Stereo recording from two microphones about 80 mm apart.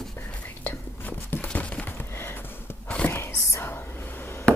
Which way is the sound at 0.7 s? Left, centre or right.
Left.